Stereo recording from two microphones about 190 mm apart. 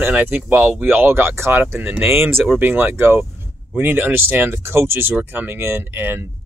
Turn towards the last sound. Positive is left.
turn(degrees=-10)  # may be behind; listen again after turning